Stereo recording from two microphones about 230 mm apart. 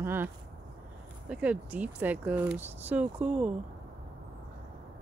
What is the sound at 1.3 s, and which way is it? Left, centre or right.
Speech, centre.